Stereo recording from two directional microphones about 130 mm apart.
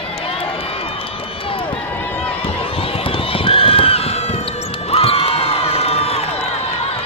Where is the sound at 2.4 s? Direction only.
45° left (ahead or behind).